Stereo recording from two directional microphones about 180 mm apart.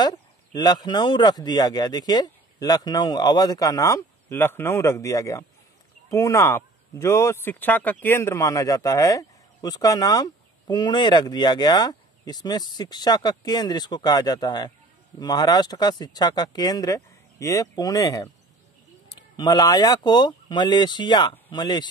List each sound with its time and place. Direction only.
0.0 s a man's voice: 25° left (ahead or behind)